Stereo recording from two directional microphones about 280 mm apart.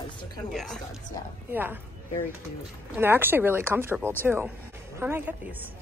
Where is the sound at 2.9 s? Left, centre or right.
Centre.